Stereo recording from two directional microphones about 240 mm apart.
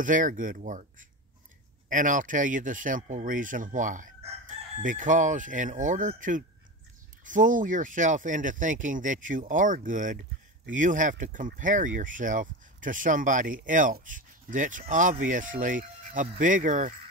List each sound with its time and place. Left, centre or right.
0.0 s speech: right